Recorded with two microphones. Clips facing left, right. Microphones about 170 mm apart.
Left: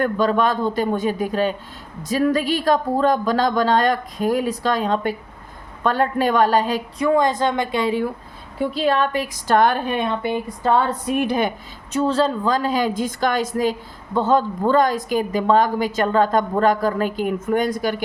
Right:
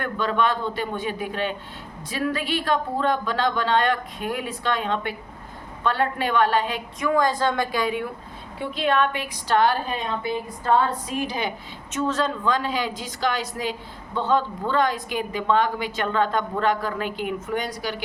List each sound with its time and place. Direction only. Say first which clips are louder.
0.0 s speech: left 5 dB; 40° left (ahead or behind)
7.1 s a woman's voice: left 3 dB; 20° left (ahead or behind); by 11.5 s 55° left (ahead or behind)
11.9 s a woman's voice: left 6 dB; 30° left (ahead or behind); by 18.0 s 50° left (ahead or behind)